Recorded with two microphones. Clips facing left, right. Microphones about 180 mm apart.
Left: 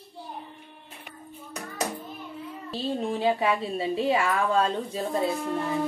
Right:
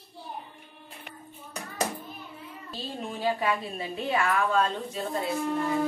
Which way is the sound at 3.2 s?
30° left (ahead or behind).